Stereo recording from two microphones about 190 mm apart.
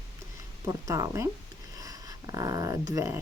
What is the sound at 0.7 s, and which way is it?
Speech, 20° right (ahead or behind).